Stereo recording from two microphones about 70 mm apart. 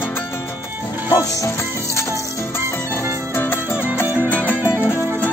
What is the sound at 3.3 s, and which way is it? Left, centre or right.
Music, left.